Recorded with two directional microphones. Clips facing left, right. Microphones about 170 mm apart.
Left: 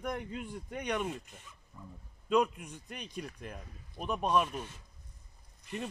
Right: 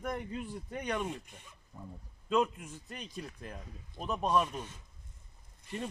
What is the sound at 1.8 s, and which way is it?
Speech, 40° right (ahead or behind).